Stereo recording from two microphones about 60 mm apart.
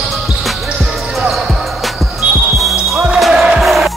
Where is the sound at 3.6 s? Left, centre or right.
Centre.